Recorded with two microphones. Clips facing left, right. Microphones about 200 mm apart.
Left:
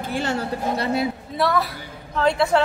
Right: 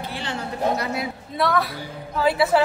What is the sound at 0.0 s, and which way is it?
Speech, 45° left (ahead or behind).